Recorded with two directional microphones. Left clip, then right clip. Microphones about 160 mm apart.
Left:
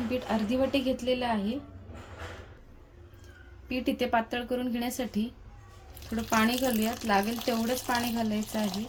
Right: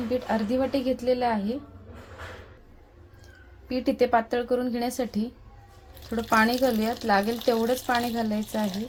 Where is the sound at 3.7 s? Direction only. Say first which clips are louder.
Right 5 dB; 30° right (ahead or behind).